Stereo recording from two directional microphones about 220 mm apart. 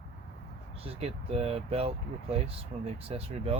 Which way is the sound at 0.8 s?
25° right (ahead or behind).